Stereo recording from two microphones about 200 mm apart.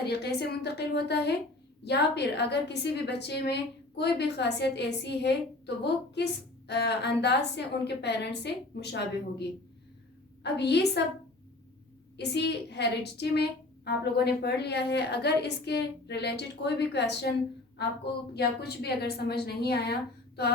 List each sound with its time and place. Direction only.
0.0 s a woman's voice: 55° left (ahead or behind)
10.4 s a woman's voice: 55° left (ahead or behind)
12.1 s a woman's voice: 55° left (ahead or behind)
18.3 s a woman's voice: 55° left (ahead or behind)